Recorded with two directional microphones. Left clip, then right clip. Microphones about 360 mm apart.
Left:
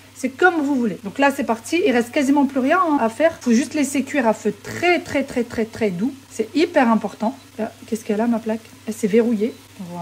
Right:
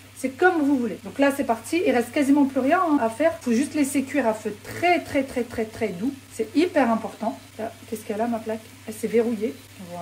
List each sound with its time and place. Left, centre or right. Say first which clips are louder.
0.2 s speech: left 3 dB; left